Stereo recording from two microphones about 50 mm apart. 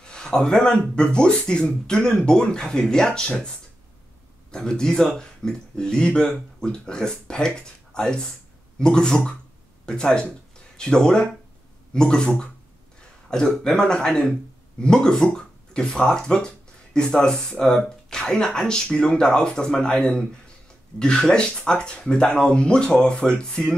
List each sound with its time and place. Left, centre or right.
0.0 s speech: centre